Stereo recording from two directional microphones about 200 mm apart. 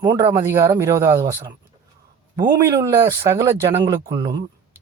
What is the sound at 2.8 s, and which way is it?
Speech, 15° right (ahead or behind).